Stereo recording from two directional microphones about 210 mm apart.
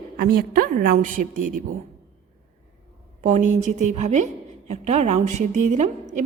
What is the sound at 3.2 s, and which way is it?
A woman's voice, 35° right (ahead or behind).